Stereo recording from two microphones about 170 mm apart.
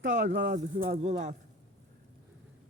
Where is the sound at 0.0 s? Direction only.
55° right (ahead or behind).